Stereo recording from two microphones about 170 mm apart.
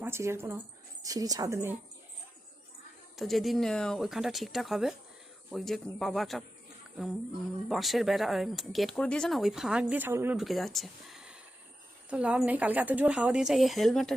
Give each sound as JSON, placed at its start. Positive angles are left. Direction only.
{"t": 0.0, "sound": "a woman's voice", "side_deg": -15}
{"t": 3.2, "sound": "speech", "side_deg": 0}
{"t": 7.7, "sound": "speech", "side_deg": 0}
{"t": 10.3, "sound": "speech", "side_deg": 0}